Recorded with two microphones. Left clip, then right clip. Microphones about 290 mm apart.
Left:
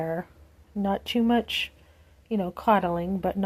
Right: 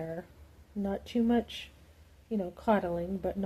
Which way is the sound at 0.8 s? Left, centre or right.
Left.